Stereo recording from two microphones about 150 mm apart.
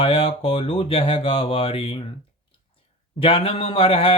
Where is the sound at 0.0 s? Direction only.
40° left (ahead or behind).